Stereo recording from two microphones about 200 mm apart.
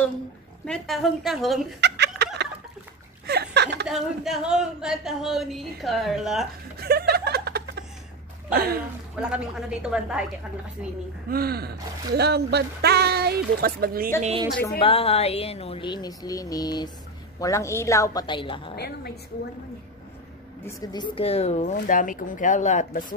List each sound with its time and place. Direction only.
0.7 s a woman's voice: centre (ahead or behind)
1.8 s fowl: 55° right (ahead or behind)
3.3 s chuckle: 55° right (ahead or behind)
3.9 s a woman's voice: centre (ahead or behind)
6.8 s chuckle: 50° right (ahead or behind)
9.2 s a woman's voice: 5° right (ahead or behind)
11.2 s speech: 50° right (ahead or behind)
14.8 s a woman's voice: 30° left (ahead or behind)
18.8 s a woman's voice: 50° left (ahead or behind)
20.6 s speech: 20° left (ahead or behind); by 23.1 s 40° left (ahead or behind)